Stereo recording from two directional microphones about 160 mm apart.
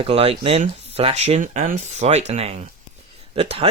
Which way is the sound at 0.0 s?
35° right (ahead or behind).